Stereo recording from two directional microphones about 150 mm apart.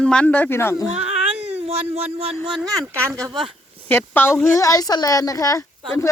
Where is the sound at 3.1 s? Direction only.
25° right (ahead or behind).